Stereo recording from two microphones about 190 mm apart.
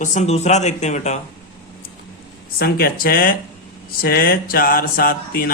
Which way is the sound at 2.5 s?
50° left (ahead or behind).